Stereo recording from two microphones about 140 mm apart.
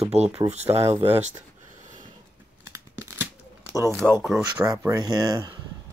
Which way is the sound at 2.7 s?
15° right (ahead or behind).